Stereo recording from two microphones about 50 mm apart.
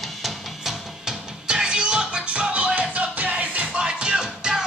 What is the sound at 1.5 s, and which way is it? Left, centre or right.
Music, centre.